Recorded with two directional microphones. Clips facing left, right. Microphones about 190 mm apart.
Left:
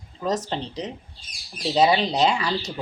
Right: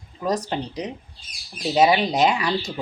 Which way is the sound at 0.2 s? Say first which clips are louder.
Right 1 dB; 10° right (ahead or behind).